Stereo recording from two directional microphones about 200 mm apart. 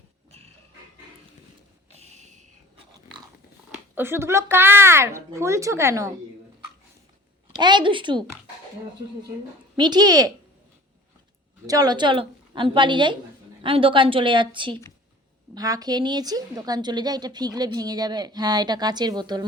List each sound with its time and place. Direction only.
0.3 s music: 30° right (ahead or behind)
2.0 s a sound: 35° right (ahead or behind)
3.9 s a woman's voice: 10° right (ahead or behind)
7.6 s a woman's voice: 25° right (ahead or behind)
9.7 s a woman's voice: 20° right (ahead or behind)
11.6 s a woman's voice: 20° right (ahead or behind)